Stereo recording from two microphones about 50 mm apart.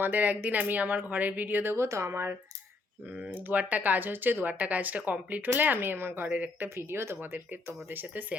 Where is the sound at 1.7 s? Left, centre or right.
Right.